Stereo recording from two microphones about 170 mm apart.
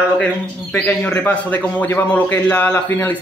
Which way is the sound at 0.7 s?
10° left (ahead or behind).